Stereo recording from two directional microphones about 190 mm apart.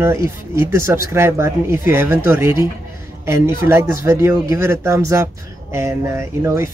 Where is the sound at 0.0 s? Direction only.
15° right (ahead or behind).